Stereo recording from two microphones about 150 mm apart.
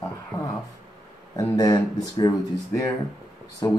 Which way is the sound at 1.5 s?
25° left (ahead or behind).